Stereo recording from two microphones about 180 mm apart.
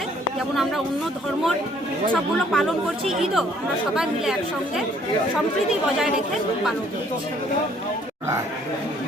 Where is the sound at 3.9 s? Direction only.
5° right (ahead or behind).